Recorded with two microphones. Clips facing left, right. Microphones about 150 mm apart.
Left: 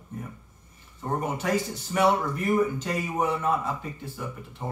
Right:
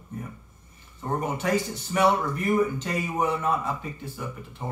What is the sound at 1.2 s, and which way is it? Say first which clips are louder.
Speech: right 1 dB; 5° left (ahead or behind).